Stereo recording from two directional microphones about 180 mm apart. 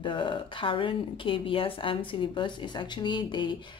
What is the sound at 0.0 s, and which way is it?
Speech, 25° left (ahead or behind).